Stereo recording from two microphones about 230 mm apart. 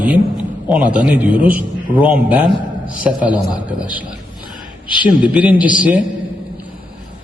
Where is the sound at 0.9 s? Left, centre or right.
Centre.